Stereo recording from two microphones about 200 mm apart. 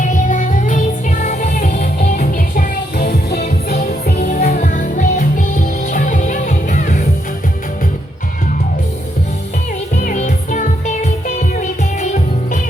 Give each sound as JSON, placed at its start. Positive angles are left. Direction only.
{"t": 0.0, "sound": "music", "side_deg": 40}
{"t": 9.9, "sound": "music", "side_deg": 40}